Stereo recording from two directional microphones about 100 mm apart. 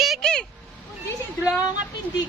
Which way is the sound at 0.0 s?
5° left (ahead or behind).